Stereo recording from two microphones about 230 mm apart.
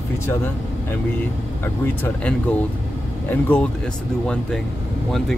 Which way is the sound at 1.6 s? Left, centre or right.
Centre.